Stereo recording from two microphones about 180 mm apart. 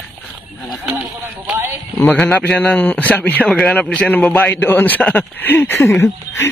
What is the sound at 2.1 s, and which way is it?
Speech, 10° left (ahead or behind).